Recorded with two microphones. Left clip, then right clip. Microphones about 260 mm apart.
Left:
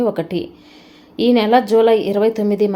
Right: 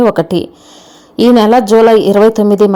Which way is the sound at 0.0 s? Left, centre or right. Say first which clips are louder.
Right 9 dB; right.